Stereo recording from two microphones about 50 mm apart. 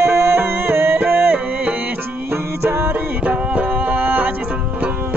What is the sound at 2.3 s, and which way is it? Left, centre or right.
Music, right.